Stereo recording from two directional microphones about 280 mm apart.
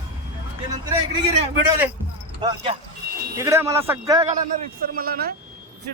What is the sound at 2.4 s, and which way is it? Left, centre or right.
A man's voice, centre.